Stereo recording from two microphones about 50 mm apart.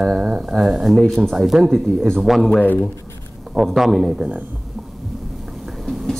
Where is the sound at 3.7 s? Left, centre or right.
Centre.